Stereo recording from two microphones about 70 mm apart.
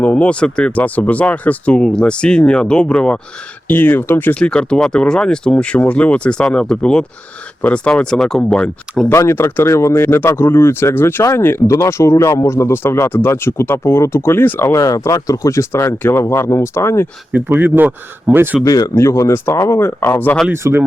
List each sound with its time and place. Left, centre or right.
0.0 s speech: centre
3.7 s speech: left
4.4 s speech: centre
9.1 s speech: left
14.8 s speech: left
17.3 s speech: right
18.6 s speech: left
18.9 s speech: left
20.5 s speech: right